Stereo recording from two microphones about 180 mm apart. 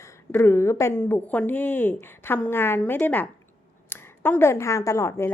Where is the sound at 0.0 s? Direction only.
15° left (ahead or behind).